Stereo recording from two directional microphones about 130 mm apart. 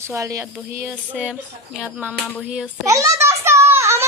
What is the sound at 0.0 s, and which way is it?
Speech, 20° right (ahead or behind).